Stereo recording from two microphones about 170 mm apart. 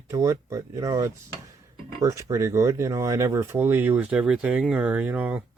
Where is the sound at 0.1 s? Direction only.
20° right (ahead or behind).